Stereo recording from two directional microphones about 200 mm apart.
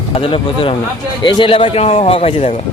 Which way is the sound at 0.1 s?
25° left (ahead or behind).